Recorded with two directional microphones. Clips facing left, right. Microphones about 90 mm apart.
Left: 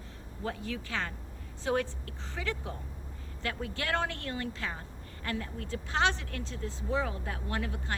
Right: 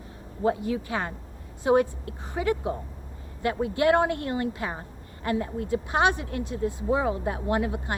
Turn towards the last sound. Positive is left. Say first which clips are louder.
# right 9 dB
turn(degrees=-20)  # may be behind; listen again after turning